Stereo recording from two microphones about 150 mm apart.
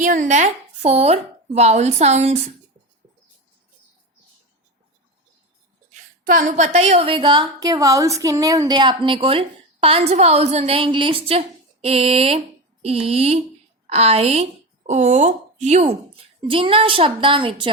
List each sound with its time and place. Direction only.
0.0 s a woman's voice: 60° right (ahead or behind)
5.9 s a woman's voice: 60° right (ahead or behind); by 17.7 s 35° right (ahead or behind)